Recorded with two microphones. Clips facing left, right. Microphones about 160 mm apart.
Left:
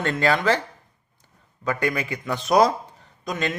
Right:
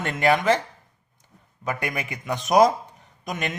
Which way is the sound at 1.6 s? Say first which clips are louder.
Left 4 dB; 20° right (ahead or behind).